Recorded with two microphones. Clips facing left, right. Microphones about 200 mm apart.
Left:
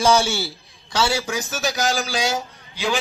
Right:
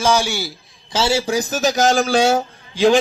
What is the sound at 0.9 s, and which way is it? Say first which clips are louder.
A man's voice: right 4 dB; 30° right (ahead or behind).